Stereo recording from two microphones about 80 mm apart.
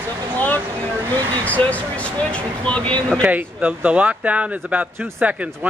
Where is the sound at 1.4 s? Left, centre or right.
Centre.